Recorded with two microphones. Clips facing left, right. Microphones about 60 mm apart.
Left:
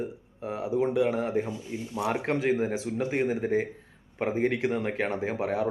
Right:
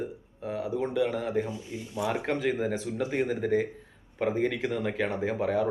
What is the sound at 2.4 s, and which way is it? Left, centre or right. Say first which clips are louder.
A man's voice: left 2 dB; left.